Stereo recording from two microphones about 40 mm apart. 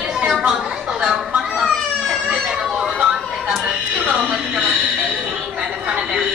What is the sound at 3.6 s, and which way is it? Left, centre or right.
Music, right.